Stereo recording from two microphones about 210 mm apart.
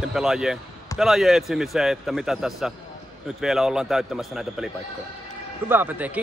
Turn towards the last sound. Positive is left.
turn(degrees=-10)  # may be behind; listen again after turning